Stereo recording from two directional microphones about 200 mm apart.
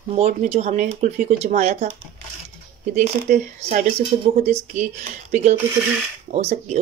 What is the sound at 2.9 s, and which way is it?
Speech, 35° right (ahead or behind).